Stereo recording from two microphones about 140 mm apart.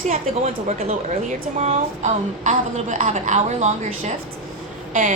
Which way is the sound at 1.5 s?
55° right (ahead or behind).